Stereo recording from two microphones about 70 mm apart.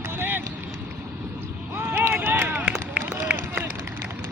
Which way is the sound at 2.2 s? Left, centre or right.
Right.